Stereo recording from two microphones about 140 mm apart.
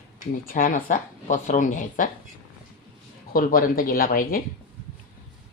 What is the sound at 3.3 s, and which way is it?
Speech, 90° left.